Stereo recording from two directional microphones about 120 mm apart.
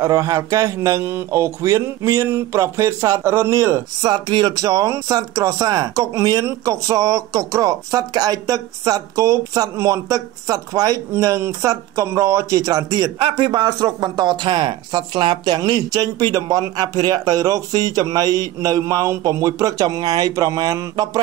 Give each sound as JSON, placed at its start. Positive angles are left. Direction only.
{"t": 0.0, "sound": "speech", "side_deg": -25}
{"t": 13.2, "sound": "speech", "side_deg": -40}